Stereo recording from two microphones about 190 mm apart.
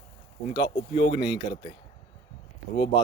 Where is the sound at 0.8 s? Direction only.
30° left (ahead or behind).